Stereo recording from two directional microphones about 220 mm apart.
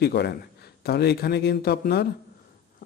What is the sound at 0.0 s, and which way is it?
Speech, 45° left (ahead or behind).